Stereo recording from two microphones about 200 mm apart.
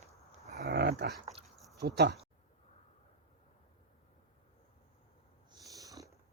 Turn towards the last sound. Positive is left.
turn(degrees=-15)  # may be behind; listen again after turning